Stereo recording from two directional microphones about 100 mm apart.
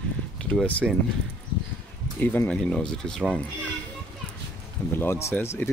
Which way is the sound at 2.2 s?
20° left (ahead or behind).